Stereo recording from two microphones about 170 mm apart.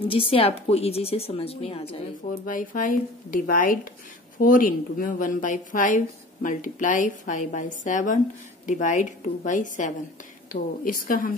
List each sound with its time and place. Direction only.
0.1 s a woman's voice: 35° left (ahead or behind)
2.4 s a woman's voice: 50° left (ahead or behind)